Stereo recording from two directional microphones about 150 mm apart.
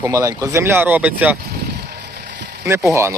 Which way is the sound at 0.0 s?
20° right (ahead or behind).